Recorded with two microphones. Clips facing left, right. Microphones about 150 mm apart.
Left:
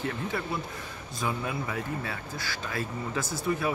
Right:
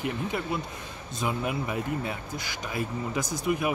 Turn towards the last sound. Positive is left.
turn(degrees=-15)  # may be behind; listen again after turning